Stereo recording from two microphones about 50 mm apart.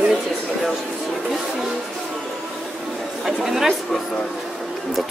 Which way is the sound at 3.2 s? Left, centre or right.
Centre.